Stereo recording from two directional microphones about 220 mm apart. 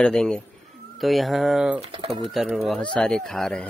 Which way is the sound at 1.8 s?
25° right (ahead or behind).